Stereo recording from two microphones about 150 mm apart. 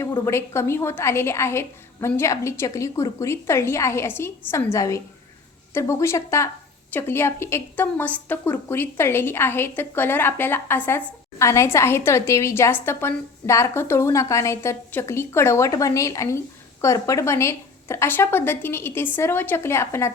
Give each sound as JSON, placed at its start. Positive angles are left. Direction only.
{"t": 0.0, "sound": "a woman's voice", "side_deg": 20}